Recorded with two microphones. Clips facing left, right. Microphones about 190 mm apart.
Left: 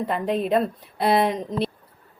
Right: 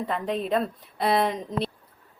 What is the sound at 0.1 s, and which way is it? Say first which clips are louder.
Speech: left 4 dB; 5° left (ahead or behind).